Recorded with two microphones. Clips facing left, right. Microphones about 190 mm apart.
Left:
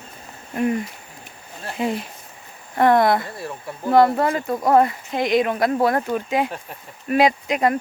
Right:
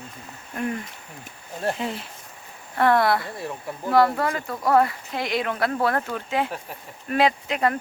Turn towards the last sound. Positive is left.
turn(degrees=15)  # may be behind; listen again after turning